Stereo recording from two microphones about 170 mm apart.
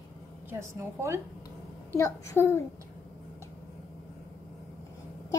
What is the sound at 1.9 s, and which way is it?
Speech, 15° left (ahead or behind).